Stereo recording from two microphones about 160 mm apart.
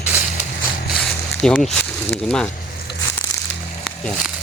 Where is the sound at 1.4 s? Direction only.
5° left (ahead or behind).